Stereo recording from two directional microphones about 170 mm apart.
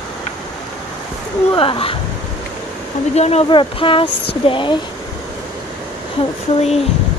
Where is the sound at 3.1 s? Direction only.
40° left (ahead or behind).